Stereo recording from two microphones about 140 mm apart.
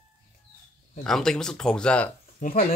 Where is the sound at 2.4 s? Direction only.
60° left (ahead or behind).